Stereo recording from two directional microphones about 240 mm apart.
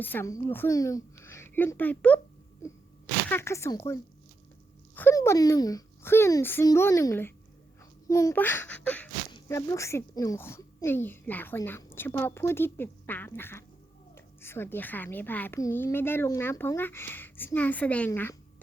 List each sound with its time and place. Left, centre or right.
0.0 s a woman's voice: centre
3.2 s a child's voice: centre